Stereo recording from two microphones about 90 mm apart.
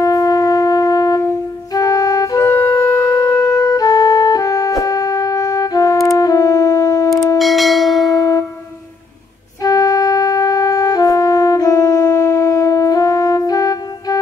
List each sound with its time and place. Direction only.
0.0 s wind instrument: 45° left (ahead or behind)
2.4 s wind instrument: 30° left (ahead or behind)
7.3 s church bell: centre (ahead or behind)
8.2 s music: 40° left (ahead or behind)
9.6 s music: 40° left (ahead or behind)